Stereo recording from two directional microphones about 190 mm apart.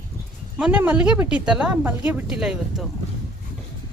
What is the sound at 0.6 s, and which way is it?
Speech, 10° right (ahead or behind).